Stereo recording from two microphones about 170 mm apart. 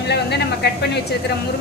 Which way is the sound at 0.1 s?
75° left (ahead or behind).